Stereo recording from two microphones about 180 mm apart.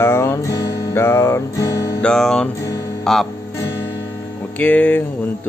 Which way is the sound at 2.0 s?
5° left (ahead or behind).